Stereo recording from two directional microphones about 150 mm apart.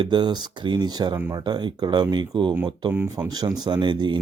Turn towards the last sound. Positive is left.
turn(degrees=-30)  # may be behind; listen again after turning